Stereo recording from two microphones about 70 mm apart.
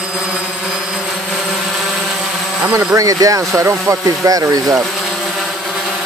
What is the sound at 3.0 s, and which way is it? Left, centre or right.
Speech, right.